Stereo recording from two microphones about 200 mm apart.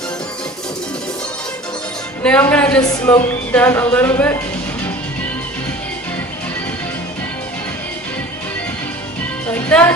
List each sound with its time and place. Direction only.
2.2 s speech: 5° left (ahead or behind)
9.5 s speech: 10° left (ahead or behind)